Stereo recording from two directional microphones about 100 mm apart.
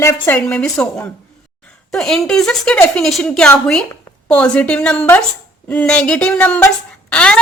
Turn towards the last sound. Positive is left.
turn(degrees=10)  # may be behind; listen again after turning